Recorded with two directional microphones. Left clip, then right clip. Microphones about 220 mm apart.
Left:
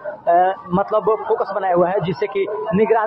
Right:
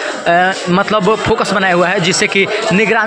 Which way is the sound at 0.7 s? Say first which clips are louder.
Right 5 dB; 20° right (ahead or behind).